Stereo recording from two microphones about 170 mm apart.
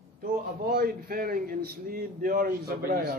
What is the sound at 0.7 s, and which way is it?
Speech, 60° right (ahead or behind).